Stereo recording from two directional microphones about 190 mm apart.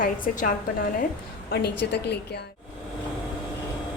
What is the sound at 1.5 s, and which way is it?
Speech, 60° left (ahead or behind).